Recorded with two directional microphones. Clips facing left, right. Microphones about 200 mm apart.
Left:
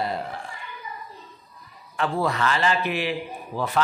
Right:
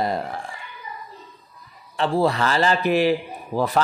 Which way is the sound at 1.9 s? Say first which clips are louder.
Right 4 dB; 30° right (ahead or behind).